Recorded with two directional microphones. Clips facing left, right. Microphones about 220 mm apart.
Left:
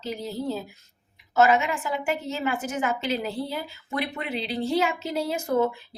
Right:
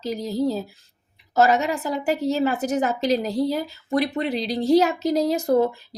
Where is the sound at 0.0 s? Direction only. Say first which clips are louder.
Right 7 dB; 40° right (ahead or behind).